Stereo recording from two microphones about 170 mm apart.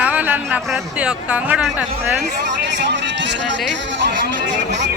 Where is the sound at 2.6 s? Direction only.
90° right.